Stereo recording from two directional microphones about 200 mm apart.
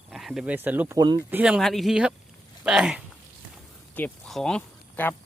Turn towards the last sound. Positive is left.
turn(degrees=5)  # may be behind; listen again after turning